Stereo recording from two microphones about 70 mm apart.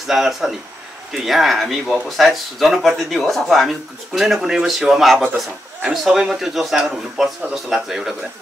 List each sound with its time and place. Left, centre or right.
0.0 s speech: centre